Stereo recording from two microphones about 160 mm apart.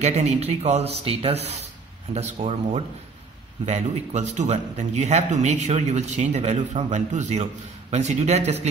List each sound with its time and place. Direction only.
0.0 s speech: 45° right (ahead or behind)